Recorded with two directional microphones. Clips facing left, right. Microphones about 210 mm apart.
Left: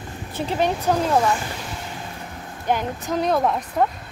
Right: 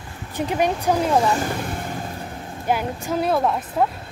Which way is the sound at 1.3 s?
55° right (ahead or behind).